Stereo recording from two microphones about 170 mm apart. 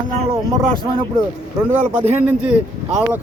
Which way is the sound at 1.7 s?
10° right (ahead or behind).